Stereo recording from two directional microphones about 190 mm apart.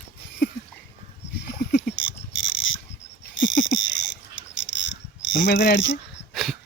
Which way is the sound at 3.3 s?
75° left (ahead or behind).